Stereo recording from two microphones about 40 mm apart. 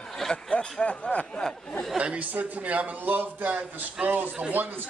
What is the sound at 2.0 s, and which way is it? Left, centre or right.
Chuckle, right.